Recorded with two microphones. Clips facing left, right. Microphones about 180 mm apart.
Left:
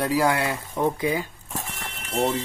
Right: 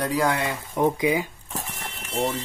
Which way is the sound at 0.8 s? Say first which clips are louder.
Right 3 dB; 15° right (ahead or behind).